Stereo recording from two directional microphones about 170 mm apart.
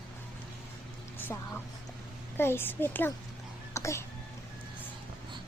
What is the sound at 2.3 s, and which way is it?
Speech, 15° left (ahead or behind).